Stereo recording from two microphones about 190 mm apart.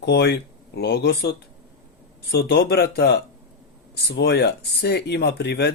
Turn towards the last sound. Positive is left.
turn(degrees=60)  # may be behind; listen again after turning